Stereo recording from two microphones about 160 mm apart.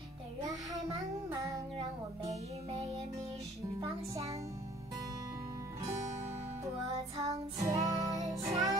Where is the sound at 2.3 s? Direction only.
40° right (ahead or behind).